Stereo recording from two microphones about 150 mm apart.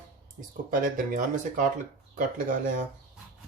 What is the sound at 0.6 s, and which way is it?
Speech, 65° right (ahead or behind).